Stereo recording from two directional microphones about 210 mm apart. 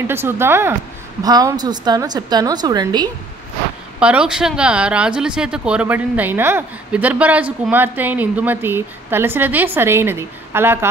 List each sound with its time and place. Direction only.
0.1 s a woman's voice: 10° right (ahead or behind)
4.0 s speech: 5° right (ahead or behind)